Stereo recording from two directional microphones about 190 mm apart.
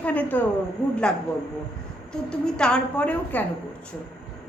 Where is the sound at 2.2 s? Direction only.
5° left (ahead or behind).